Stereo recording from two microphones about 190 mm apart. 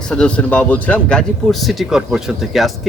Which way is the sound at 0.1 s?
5° left (ahead or behind).